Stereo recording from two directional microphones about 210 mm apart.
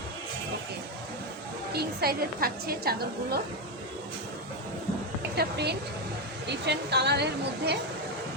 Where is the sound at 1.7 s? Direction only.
45° right (ahead or behind).